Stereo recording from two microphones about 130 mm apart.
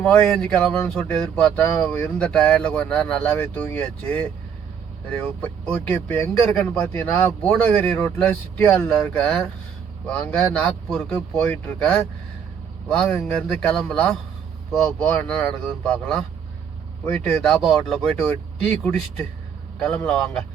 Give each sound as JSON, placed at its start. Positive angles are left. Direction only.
{"t": 0.0, "sound": "speech", "side_deg": 5}
{"t": 13.2, "sound": "speech", "side_deg": 10}
{"t": 20.1, "sound": "speech", "side_deg": 10}